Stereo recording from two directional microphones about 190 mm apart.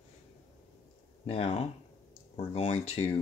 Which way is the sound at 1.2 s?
30° left (ahead or behind).